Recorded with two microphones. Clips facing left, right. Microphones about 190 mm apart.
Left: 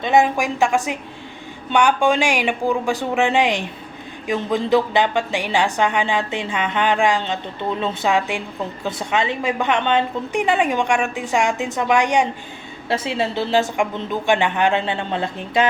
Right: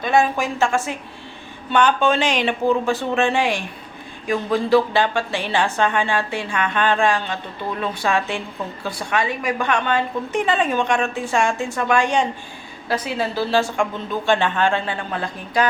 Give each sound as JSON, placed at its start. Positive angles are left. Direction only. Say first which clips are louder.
{"t": 0.0, "sound": "a woman's voice", "louder": "left 2 dB", "side_deg": 20}